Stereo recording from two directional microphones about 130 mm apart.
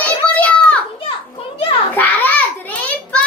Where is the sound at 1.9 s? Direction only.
15° left (ahead or behind).